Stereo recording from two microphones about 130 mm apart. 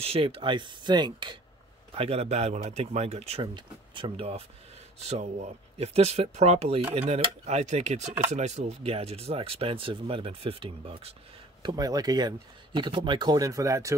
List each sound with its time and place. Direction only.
0.0 s speech: 45° right (ahead or behind)
2.0 s speech: 50° right (ahead or behind)
3.5 s speech: 40° right (ahead or behind)
5.0 s speech: 60° right (ahead or behind)
11.6 s speech: 30° right (ahead or behind)